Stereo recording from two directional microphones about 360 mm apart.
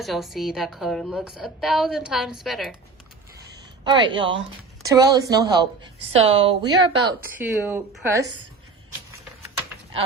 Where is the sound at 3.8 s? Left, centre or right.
Centre.